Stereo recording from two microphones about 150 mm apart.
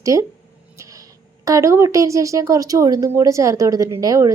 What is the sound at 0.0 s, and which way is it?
Speech, 20° right (ahead or behind).